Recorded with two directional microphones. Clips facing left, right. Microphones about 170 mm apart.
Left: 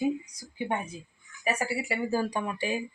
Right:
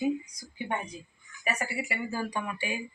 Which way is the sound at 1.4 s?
30° left (ahead or behind).